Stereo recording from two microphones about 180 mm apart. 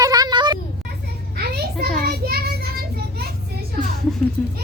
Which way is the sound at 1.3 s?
60° right (ahead or behind).